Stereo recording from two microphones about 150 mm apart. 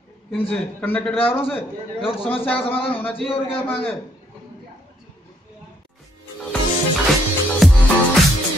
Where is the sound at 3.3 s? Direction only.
35° left (ahead or behind).